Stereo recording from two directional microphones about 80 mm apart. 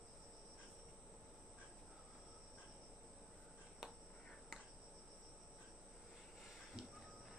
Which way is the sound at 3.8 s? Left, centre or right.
Centre.